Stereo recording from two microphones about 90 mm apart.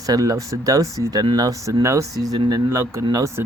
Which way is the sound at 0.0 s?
45° right (ahead or behind).